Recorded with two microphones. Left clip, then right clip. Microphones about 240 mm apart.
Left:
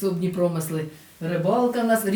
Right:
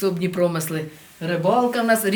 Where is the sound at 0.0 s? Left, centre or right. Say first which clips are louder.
Right 3 dB; centre.